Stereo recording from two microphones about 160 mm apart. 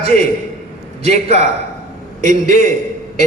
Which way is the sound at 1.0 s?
45° right (ahead or behind).